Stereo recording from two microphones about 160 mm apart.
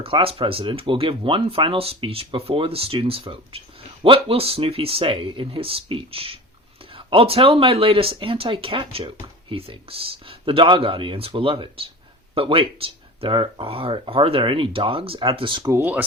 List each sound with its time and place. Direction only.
0.0 s speech: 35° right (ahead or behind)
15.7 s speech: 10° right (ahead or behind)